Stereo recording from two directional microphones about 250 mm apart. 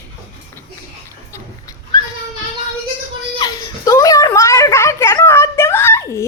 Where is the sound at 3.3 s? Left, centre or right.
Centre.